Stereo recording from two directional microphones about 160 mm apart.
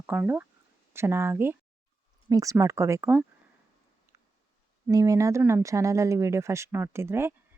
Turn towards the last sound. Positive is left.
turn(degrees=-15)  # may be behind; listen again after turning